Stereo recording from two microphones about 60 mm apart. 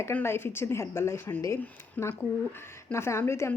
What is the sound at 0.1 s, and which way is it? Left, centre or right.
Speech, left.